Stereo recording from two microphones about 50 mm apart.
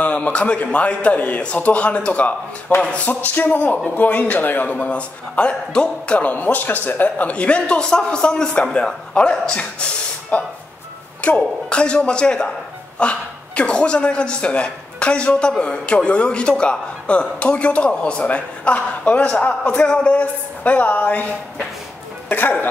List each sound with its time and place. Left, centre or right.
0.0 s a man's voice: left
4.7 s a man's voice: left
6.2 s a man's voice: left
22.3 s a man's voice: left